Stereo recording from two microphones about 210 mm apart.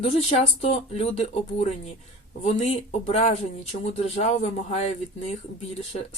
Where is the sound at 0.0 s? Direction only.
30° left (ahead or behind).